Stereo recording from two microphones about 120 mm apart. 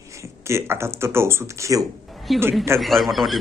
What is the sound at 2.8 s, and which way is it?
Speech, centre (ahead or behind).